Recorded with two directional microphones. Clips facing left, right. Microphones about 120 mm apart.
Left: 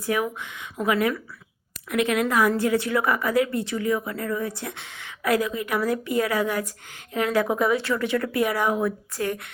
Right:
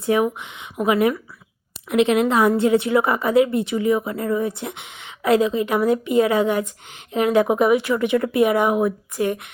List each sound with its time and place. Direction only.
0.0 s speech: 25° right (ahead or behind)